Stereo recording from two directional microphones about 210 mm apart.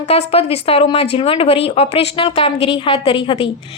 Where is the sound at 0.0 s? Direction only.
30° left (ahead or behind).